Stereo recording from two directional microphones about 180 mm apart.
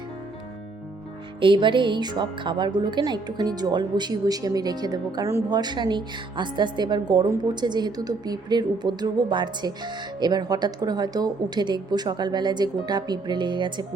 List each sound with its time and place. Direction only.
1.4 s a woman's voice: 25° right (ahead or behind)